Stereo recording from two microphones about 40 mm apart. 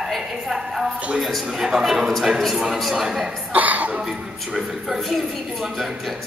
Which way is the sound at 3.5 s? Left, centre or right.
Right.